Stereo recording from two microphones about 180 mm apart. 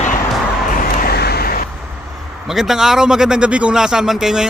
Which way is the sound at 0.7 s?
60° left (ahead or behind).